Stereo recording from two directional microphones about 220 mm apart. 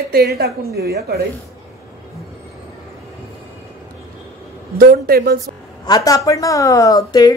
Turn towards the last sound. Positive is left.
turn(degrees=15)  # may be behind; listen again after turning